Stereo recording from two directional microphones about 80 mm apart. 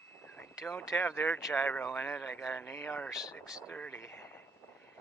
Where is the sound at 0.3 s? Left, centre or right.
Left.